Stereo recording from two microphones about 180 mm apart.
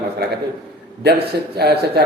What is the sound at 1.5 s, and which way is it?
Speech, 60° right (ahead or behind).